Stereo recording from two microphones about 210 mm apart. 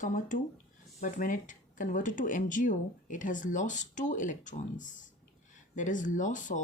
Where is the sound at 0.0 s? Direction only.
35° left (ahead or behind).